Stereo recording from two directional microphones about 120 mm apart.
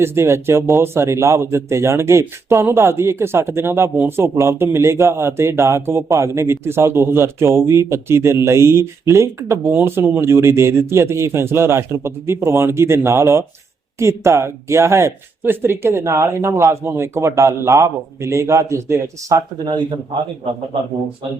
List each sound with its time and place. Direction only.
0.0 s speech: 20° right (ahead or behind)